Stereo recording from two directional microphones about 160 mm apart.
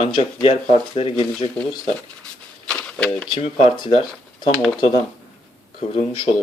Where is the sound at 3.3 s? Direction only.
35° left (ahead or behind).